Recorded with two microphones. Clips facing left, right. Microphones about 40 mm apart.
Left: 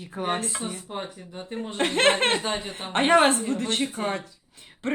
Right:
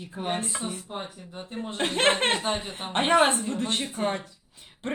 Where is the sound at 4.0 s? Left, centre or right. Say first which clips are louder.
Right 1 dB; centre.